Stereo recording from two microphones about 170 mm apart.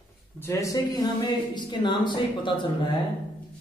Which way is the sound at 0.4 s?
15° left (ahead or behind).